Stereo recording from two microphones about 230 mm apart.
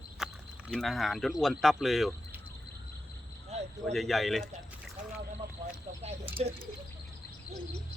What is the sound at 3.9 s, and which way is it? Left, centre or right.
Speech, centre.